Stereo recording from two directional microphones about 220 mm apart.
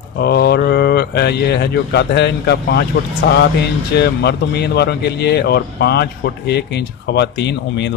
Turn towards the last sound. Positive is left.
turn(degrees=50)  # may be behind; listen again after turning